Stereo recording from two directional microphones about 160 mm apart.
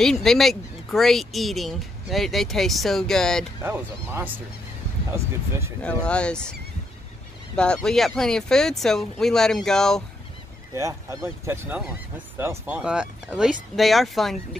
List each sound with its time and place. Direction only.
0.0 s speech: 5° left (ahead or behind)
3.6 s speech: 15° right (ahead or behind)
6.0 s speech: 5° left (ahead or behind)
7.5 s speech: 5° left (ahead or behind)
10.7 s speech: 20° right (ahead or behind); by 14.6 s centre (ahead or behind)